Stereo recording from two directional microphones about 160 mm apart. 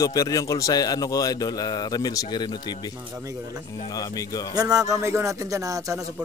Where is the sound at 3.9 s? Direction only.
20° left (ahead or behind).